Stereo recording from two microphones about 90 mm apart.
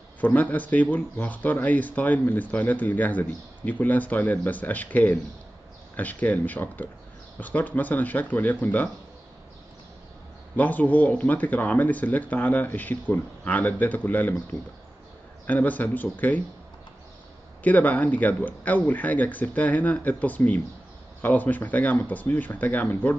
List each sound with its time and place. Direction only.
0.2 s speech: 20° left (ahead or behind)
10.5 s speech: 20° left (ahead or behind)
15.4 s speech: 20° left (ahead or behind)
17.6 s speech: 15° left (ahead or behind)